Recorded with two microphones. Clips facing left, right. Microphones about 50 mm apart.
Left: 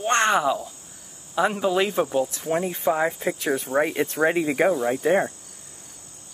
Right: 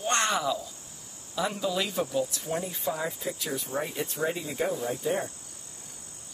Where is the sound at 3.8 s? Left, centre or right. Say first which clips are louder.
Left 9 dB; left.